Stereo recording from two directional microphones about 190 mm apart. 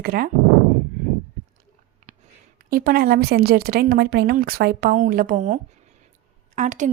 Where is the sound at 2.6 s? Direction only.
50° right (ahead or behind).